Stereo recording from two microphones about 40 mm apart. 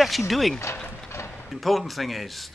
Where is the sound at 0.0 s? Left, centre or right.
Centre.